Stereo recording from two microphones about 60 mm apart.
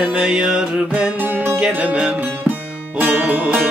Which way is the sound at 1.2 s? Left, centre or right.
Right.